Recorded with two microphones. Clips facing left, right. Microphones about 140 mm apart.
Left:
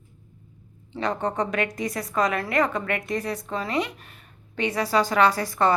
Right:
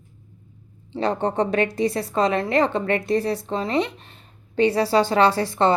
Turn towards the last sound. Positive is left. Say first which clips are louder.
# right 2 dB
turn(degrees=-25)  # may be behind; listen again after turning